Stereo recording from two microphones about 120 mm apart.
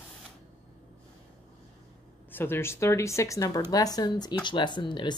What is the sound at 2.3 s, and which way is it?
Speech, 20° left (ahead or behind).